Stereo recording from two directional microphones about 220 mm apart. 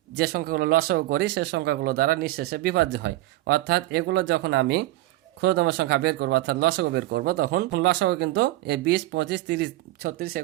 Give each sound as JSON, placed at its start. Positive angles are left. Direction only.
{"t": 0.2, "sound": "speech", "side_deg": -40}